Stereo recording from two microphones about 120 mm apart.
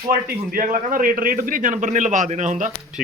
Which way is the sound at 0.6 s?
90° right.